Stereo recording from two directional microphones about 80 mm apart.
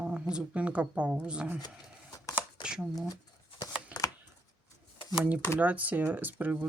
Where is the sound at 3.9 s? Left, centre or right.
Centre.